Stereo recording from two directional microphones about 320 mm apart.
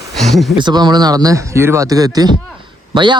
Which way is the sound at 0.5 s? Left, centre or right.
Centre.